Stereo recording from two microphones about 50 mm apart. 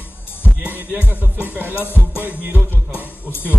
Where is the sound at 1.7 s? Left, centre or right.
Left.